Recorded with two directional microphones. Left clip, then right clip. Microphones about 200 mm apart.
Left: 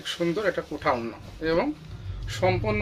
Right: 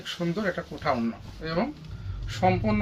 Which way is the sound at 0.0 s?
50° left (ahead or behind).